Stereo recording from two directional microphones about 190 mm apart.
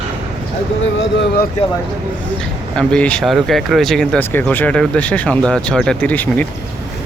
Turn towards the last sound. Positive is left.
turn(degrees=10)  # may be behind; listen again after turning